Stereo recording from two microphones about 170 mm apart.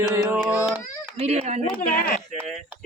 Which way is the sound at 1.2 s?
40° right (ahead or behind).